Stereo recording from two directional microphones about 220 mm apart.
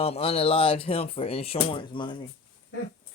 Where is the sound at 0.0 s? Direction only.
25° left (ahead or behind).